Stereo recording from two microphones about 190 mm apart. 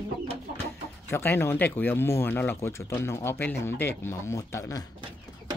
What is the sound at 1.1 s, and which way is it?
Speech, 10° left (ahead or behind).